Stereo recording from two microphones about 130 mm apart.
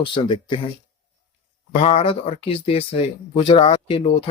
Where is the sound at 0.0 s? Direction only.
40° left (ahead or behind).